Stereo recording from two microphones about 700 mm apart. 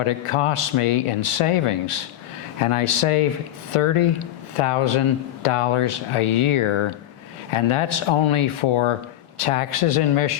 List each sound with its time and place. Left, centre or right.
0.0 s speech: left